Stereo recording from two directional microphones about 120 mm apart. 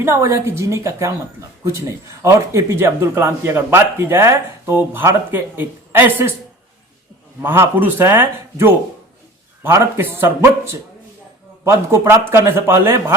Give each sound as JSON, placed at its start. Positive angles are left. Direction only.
{"t": 0.0, "sound": "speech", "side_deg": -25}
{"t": 7.4, "sound": "speech", "side_deg": -20}
{"t": 11.6, "sound": "speech", "side_deg": -25}